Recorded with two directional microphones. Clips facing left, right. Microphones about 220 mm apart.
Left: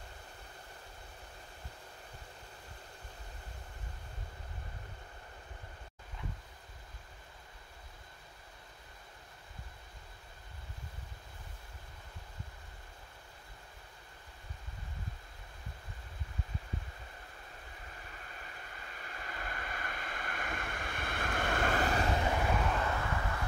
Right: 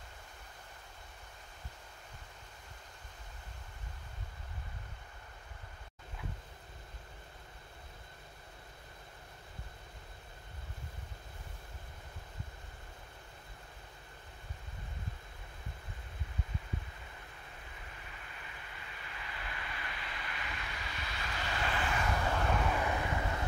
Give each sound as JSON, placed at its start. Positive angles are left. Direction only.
{"t": 18.3, "sound": "vehicle", "side_deg": 45}
{"t": 22.7, "sound": "vehicle", "side_deg": -15}